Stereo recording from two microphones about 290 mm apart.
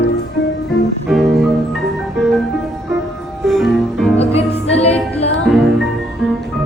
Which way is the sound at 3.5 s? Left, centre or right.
Centre.